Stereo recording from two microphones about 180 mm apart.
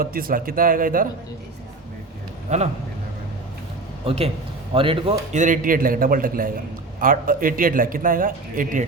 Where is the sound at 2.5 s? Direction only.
40° right (ahead or behind).